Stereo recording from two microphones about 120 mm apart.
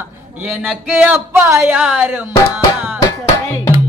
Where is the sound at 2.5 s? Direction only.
15° right (ahead or behind).